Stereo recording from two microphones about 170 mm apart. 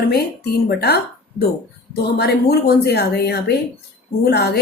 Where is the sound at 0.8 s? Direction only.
70° left (ahead or behind).